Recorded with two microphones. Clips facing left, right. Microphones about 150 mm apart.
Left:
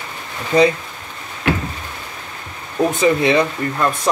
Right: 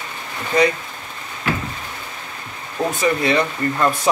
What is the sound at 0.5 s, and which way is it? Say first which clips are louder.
Speech: left 3 dB; 30° left (ahead or behind).